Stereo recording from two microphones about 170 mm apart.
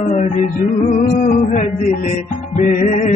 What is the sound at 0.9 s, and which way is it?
Music, 35° left (ahead or behind).